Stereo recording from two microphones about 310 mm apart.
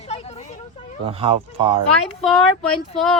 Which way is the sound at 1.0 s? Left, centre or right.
Centre.